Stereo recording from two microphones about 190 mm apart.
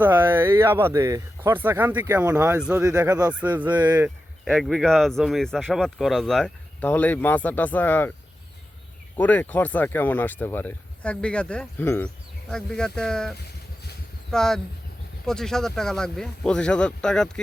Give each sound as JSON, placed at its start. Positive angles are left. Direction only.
{"t": 0.0, "sound": "speech", "side_deg": -10}
{"t": 3.1, "sound": "speech", "side_deg": -20}
{"t": 3.4, "sound": "speech", "side_deg": -10}
{"t": 3.8, "sound": "speech", "side_deg": -20}
{"t": 4.4, "sound": "speech", "side_deg": 0}
{"t": 9.1, "sound": "speech", "side_deg": 10}